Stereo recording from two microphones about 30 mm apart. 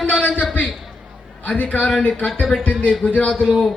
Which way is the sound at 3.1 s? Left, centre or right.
Left.